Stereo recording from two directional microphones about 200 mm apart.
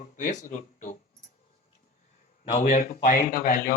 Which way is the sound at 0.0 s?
40° left (ahead or behind).